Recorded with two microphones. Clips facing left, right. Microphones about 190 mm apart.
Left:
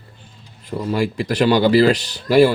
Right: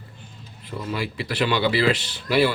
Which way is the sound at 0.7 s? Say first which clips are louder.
Left 8 dB; 40° left (ahead or behind).